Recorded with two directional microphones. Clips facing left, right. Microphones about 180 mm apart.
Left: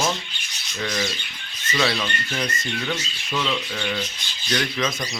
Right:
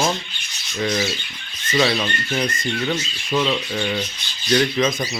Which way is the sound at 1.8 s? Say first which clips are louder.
Right 4 dB; 25° right (ahead or behind).